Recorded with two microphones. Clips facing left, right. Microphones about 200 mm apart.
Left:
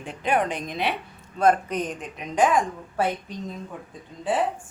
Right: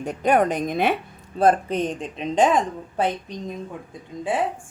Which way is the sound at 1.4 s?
30° right (ahead or behind).